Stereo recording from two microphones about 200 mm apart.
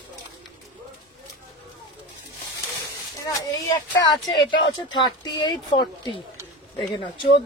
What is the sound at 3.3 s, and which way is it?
Speech, 20° left (ahead or behind).